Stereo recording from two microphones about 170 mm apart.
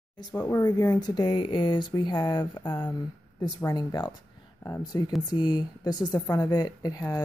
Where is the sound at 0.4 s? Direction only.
15° left (ahead or behind).